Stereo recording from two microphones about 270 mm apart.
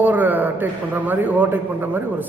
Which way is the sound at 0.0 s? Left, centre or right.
Centre.